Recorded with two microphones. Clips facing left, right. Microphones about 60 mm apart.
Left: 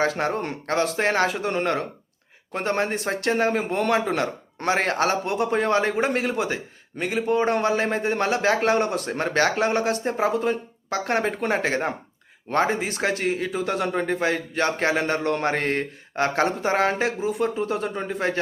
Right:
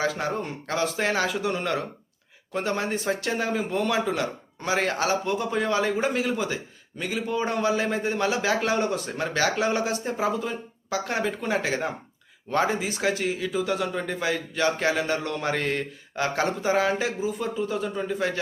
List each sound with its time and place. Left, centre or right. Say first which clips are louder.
0.0 s a man's voice: left 3 dB; left